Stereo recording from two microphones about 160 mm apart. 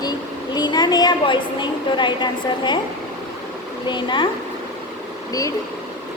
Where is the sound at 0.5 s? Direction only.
25° left (ahead or behind).